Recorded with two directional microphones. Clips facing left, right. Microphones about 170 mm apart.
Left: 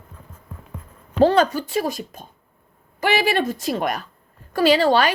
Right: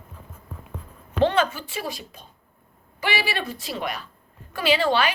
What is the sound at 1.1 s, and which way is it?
A woman's voice, 40° left (ahead or behind).